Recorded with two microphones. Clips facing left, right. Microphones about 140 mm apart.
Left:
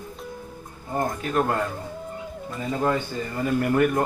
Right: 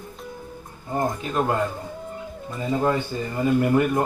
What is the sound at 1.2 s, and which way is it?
Speech, 10° right (ahead or behind).